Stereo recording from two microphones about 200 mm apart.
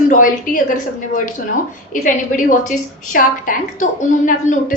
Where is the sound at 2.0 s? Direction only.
40° left (ahead or behind).